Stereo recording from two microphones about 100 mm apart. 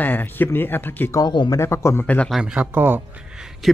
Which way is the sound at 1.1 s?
45° left (ahead or behind).